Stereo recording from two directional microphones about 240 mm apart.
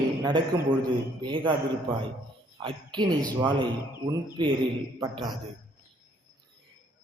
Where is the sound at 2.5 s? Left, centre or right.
Centre.